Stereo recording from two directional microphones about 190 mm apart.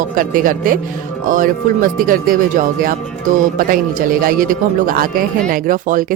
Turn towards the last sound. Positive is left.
turn(degrees=-45)  # may be behind; listen again after turning